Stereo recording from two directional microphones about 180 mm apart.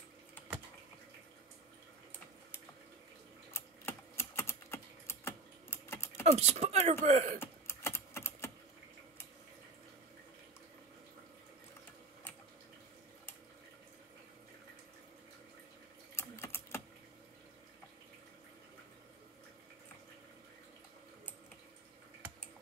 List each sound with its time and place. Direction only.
3.5 s typing: 15° left (ahead or behind)
6.3 s speech: 35° right (ahead or behind)
7.3 s typing: 15° left (ahead or behind)
16.2 s typing: 15° left (ahead or behind)